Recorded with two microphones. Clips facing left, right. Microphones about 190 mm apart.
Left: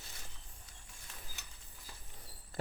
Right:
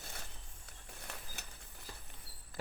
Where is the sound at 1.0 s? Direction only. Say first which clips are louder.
Right 5 dB; 65° right (ahead or behind).